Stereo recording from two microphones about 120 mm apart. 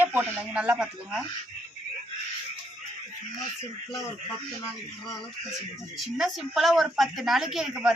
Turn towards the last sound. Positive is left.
turn(degrees=-5)  # may be behind; listen again after turning